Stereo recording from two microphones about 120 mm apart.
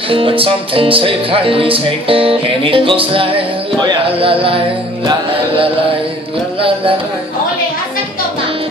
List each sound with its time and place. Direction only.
0.1 s music: 50° right (ahead or behind)